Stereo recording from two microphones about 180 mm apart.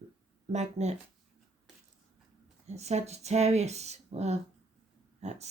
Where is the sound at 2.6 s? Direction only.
35° right (ahead or behind).